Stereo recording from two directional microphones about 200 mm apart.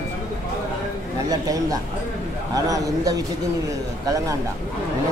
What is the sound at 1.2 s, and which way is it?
A man's voice, 20° right (ahead or behind).